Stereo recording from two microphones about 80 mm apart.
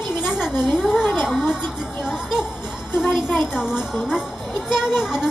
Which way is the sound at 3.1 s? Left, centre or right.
Centre.